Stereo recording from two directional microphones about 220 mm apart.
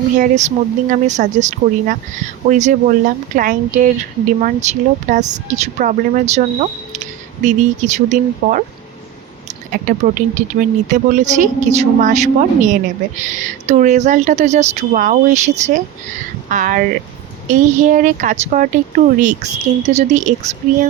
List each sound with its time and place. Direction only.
0.2 s a woman's voice: 35° right (ahead or behind)